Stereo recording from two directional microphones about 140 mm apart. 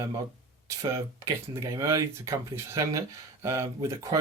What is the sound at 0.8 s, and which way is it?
Speech, 25° right (ahead or behind).